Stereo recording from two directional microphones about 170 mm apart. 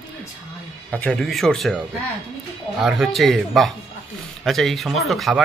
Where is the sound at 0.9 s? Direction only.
5° left (ahead or behind).